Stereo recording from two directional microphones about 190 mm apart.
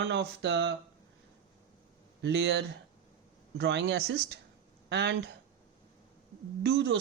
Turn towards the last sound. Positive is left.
turn(degrees=-65)  # may be behind; listen again after turning